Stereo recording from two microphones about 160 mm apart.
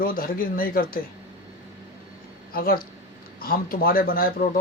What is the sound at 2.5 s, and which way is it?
Speech, 65° left (ahead or behind).